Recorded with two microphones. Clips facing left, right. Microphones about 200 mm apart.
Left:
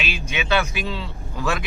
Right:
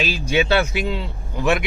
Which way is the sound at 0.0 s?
35° right (ahead or behind).